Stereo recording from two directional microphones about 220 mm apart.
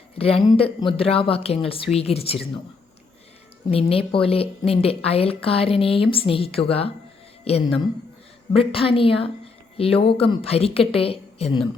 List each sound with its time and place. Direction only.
0.2 s speech: 25° left (ahead or behind)
3.7 s speech: 25° left (ahead or behind)